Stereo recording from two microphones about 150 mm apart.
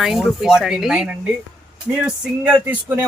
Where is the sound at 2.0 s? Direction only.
10° right (ahead or behind).